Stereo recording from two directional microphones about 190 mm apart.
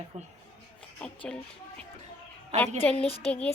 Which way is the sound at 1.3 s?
5° left (ahead or behind).